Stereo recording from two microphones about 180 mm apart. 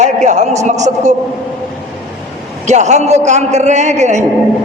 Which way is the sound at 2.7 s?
40° right (ahead or behind).